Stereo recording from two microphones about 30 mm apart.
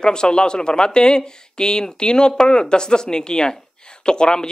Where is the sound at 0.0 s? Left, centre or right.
Left.